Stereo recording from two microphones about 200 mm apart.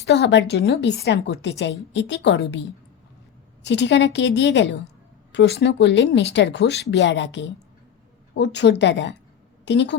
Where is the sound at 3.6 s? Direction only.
60° left (ahead or behind).